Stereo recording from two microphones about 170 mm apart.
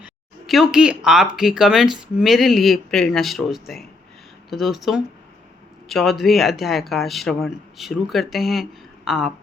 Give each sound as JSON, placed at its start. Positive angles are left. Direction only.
{"t": 0.0, "sound": "speech", "side_deg": 0}